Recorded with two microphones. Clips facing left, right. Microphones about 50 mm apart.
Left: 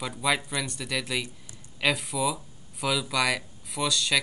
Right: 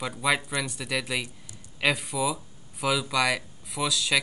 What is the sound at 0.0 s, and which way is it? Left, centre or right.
Speech, centre.